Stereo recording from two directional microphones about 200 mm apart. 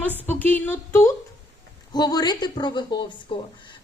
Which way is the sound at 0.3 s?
10° left (ahead or behind).